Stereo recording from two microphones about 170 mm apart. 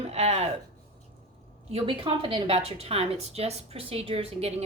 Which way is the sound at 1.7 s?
30° right (ahead or behind).